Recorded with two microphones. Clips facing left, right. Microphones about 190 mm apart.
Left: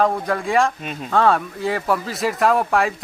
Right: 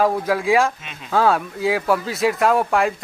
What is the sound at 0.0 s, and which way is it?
Speech, 5° right (ahead or behind).